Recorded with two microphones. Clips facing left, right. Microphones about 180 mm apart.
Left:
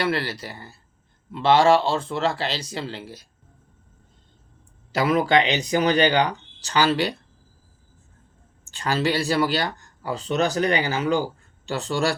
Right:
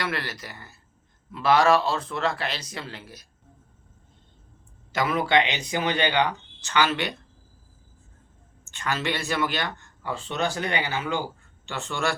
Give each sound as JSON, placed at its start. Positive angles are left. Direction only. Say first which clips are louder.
{"t": 0.0, "sound": "speech", "louder": "left 6 dB", "side_deg": 30}
{"t": 4.9, "sound": "speech", "louder": "left 4 dB", "side_deg": 35}
{"t": 8.6, "sound": "speech", "louder": "left 5 dB", "side_deg": 35}